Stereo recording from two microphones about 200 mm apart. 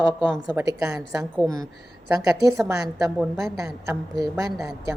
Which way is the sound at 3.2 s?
Centre (ahead or behind).